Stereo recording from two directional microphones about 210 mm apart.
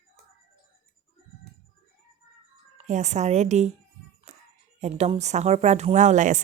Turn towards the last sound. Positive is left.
turn(degrees=-35)  # may be behind; listen again after turning